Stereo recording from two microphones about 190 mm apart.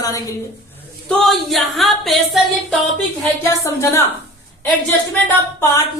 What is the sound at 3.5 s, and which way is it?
Speech, 15° left (ahead or behind).